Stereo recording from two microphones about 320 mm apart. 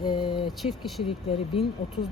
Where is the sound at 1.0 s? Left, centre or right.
Centre.